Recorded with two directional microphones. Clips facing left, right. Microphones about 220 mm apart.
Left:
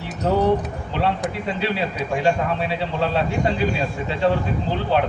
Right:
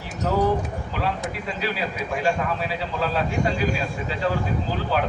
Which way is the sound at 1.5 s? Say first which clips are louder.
Left 4 dB; 30° left (ahead or behind).